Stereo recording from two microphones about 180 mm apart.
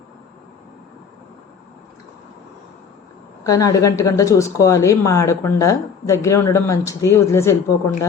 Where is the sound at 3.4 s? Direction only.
20° left (ahead or behind).